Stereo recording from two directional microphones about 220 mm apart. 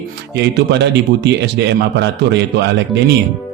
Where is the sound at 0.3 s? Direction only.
50° right (ahead or behind).